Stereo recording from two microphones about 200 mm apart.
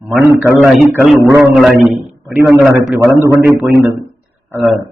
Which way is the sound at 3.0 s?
15° right (ahead or behind).